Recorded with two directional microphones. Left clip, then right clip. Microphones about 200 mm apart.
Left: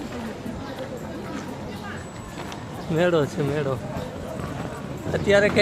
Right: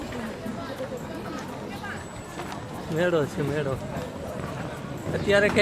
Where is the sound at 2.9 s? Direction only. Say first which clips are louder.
Left 3 dB; 15° left (ahead or behind).